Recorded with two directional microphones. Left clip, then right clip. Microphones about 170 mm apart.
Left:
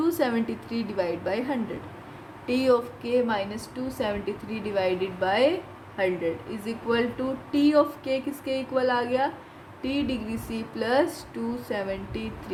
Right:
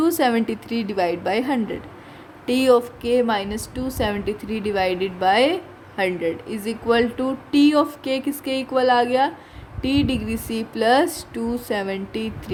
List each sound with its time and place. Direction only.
0.0 s speech: 65° right (ahead or behind)